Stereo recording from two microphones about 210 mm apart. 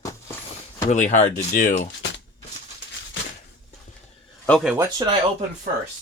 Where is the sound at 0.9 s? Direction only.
35° left (ahead or behind).